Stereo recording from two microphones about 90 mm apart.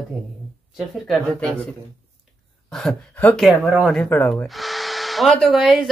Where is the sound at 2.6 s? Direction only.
5° left (ahead or behind).